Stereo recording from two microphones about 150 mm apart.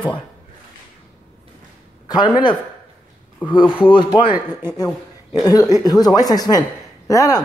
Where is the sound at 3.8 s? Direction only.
35° left (ahead or behind).